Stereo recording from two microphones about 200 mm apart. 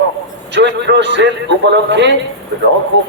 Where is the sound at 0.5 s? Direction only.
60° right (ahead or behind).